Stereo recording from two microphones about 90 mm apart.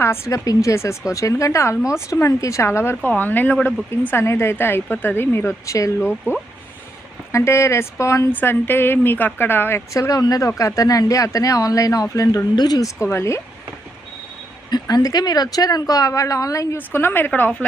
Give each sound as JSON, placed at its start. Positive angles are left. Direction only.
{"t": 0.0, "sound": "speech", "side_deg": 30}
{"t": 2.9, "sound": "a woman's voice", "side_deg": 15}
{"t": 7.3, "sound": "speech", "side_deg": 30}
{"t": 8.3, "sound": "a woman's voice", "side_deg": 20}
{"t": 13.0, "sound": "speech", "side_deg": 30}
{"t": 14.7, "sound": "speech", "side_deg": 45}
{"t": 16.7, "sound": "a woman's voice", "side_deg": 25}